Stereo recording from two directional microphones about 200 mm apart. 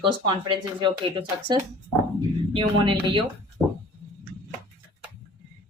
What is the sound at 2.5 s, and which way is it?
Speech, 25° right (ahead or behind).